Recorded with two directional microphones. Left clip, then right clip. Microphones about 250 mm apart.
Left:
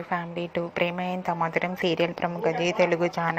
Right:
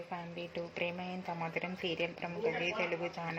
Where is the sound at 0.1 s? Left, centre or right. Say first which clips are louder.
Left 15 dB; centre.